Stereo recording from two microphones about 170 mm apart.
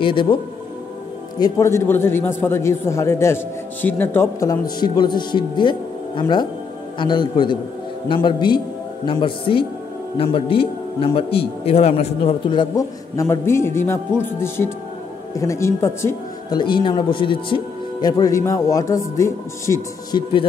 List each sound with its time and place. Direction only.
0.0 s speech: 30° left (ahead or behind)
1.4 s a man's voice: 15° left (ahead or behind)
16.5 s speech: 30° left (ahead or behind)